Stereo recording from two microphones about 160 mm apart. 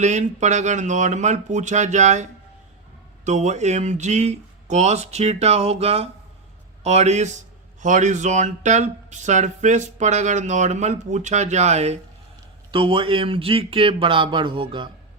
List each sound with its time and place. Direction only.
0.0 s speech: 50° right (ahead or behind)
3.2 s speech: 45° right (ahead or behind)
12.7 s speech: 30° right (ahead or behind)